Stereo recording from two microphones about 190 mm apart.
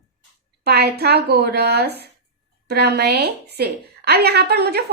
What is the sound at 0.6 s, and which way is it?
Speech, 60° right (ahead or behind).